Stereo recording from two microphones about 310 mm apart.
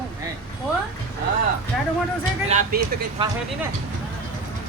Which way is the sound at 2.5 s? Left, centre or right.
Right.